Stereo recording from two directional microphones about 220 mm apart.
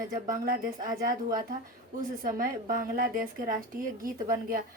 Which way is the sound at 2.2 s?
40° right (ahead or behind).